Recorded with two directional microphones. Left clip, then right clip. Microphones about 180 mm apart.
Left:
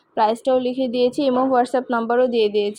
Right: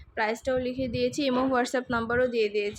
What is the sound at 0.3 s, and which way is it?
A woman's voice, 25° left (ahead or behind).